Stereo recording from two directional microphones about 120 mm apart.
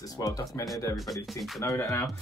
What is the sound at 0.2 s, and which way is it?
Speech, 25° left (ahead or behind).